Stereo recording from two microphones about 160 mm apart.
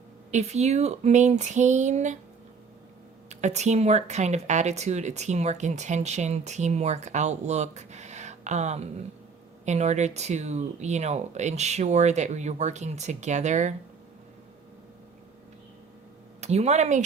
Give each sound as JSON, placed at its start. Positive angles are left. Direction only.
{"t": 0.3, "sound": "speech", "side_deg": -45}
{"t": 3.2, "sound": "speech", "side_deg": -45}
{"t": 16.4, "sound": "speech", "side_deg": -45}